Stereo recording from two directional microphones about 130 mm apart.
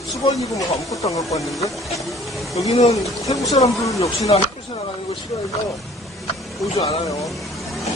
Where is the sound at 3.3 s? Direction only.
25° left (ahead or behind).